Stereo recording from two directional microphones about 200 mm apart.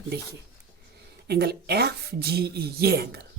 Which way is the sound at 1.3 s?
55° right (ahead or behind).